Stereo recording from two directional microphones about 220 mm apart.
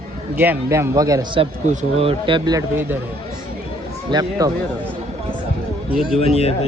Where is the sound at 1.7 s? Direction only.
30° right (ahead or behind); by 3.0 s 10° right (ahead or behind).